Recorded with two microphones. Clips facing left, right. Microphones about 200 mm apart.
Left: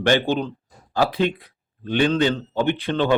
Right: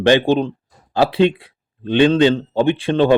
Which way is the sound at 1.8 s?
20° right (ahead or behind).